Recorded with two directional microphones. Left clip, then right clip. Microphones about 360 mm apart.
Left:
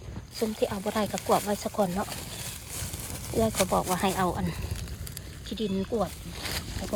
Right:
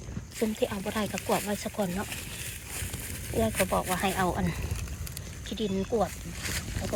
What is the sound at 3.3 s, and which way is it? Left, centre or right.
Speech, centre.